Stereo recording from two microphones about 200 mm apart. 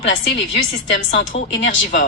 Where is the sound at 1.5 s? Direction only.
65° left (ahead or behind).